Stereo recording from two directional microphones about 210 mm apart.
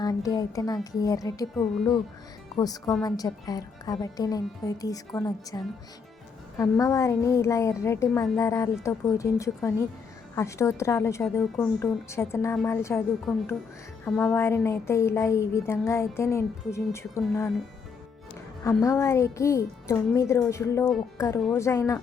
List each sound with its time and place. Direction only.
0.0 s a woman's voice: 15° left (ahead or behind)
1.7 s speech: centre (ahead or behind)
2.6 s a woman's voice: 15° left (ahead or behind)
14.0 s a woman's voice: 5° left (ahead or behind)
18.6 s a woman's voice: 15° left (ahead or behind)